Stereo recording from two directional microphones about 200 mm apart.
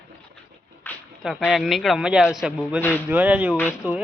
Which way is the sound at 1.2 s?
Centre (ahead or behind).